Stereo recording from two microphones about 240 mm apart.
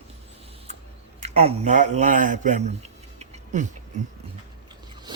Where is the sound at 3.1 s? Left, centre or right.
Right.